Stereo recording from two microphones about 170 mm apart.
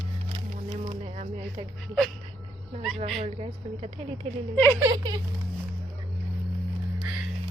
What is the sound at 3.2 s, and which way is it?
Speech, 35° right (ahead or behind).